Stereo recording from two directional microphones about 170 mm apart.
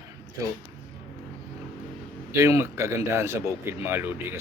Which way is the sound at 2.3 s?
15° right (ahead or behind).